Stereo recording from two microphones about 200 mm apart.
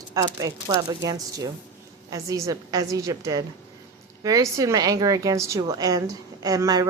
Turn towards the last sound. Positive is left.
turn(degrees=-15)  # may be behind; listen again after turning